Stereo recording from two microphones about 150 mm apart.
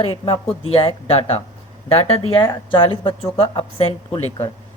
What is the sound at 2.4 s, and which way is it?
Speech, 25° left (ahead or behind).